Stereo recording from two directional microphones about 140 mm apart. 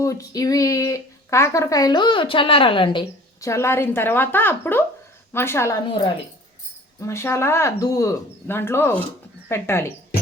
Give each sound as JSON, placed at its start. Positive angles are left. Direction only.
{"t": 0.0, "sound": "speech", "side_deg": 25}
{"t": 3.4, "sound": "speech", "side_deg": 20}
{"t": 5.9, "sound": "speech", "side_deg": 35}
{"t": 7.0, "sound": "speech", "side_deg": 20}